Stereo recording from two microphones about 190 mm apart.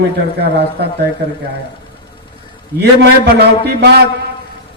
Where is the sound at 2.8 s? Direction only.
60° right (ahead or behind).